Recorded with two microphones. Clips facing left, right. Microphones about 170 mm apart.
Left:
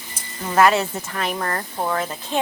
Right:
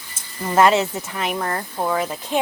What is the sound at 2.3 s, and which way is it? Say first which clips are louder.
Speech: right 1 dB; 15° right (ahead or behind).